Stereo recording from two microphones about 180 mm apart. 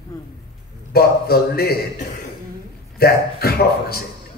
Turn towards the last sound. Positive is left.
turn(degrees=60)  # may be behind; listen again after turning